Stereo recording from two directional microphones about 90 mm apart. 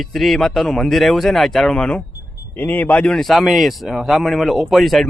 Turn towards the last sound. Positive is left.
turn(degrees=0)  # may be behind; listen again after turning